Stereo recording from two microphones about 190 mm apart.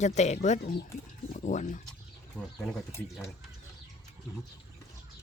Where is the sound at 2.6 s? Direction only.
5° left (ahead or behind).